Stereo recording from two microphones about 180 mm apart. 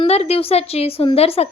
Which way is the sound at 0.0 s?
35° left (ahead or behind).